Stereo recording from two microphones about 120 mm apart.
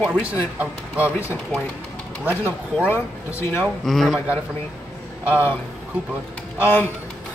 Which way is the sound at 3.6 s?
Centre (ahead or behind).